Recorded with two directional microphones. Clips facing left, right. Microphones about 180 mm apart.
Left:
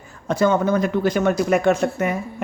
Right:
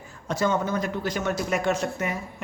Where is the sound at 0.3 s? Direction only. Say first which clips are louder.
Left 7 dB; 55° left (ahead or behind).